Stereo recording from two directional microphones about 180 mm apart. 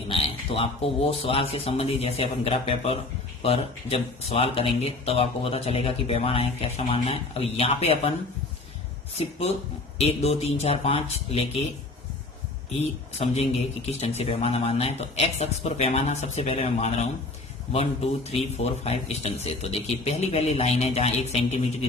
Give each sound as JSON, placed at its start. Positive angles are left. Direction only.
{"t": 0.1, "sound": "speech", "side_deg": 30}
{"t": 9.1, "sound": "speech", "side_deg": 35}
{"t": 12.8, "sound": "speech", "side_deg": 35}